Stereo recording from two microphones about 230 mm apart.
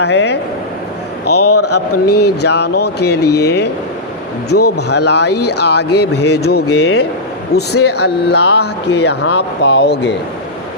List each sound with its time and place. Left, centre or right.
0.0 s speech: left
1.5 s a man's voice: left
2.1 s speech: left
4.9 s speech: left